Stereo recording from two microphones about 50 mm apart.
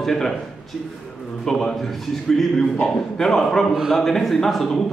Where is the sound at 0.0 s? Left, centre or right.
Centre.